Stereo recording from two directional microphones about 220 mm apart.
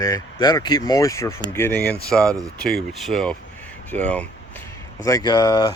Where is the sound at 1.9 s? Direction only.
5° left (ahead or behind).